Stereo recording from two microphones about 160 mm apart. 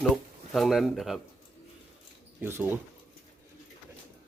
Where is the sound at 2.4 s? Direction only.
15° right (ahead or behind).